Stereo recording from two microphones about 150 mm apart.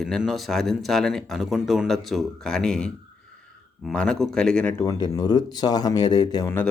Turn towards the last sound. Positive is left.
turn(degrees=25)  # may be behind; listen again after turning